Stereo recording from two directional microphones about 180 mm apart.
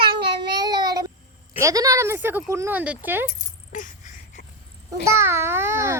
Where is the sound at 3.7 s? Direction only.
45° left (ahead or behind).